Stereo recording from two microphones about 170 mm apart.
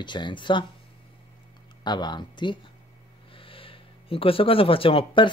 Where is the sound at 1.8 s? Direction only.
25° left (ahead or behind).